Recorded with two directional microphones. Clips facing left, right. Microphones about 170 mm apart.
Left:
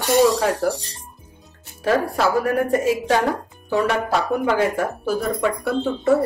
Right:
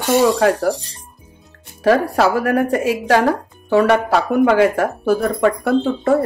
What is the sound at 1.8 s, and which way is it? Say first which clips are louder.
A woman's voice: right 5 dB; 70° right (ahead or behind).